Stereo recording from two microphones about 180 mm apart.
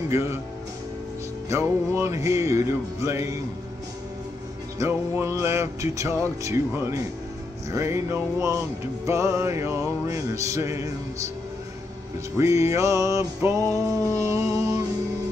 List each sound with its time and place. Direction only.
0.1 s music: 15° right (ahead or behind)
1.5 s music: 15° right (ahead or behind)
4.7 s music: 15° right (ahead or behind)
12.4 s music: 15° right (ahead or behind)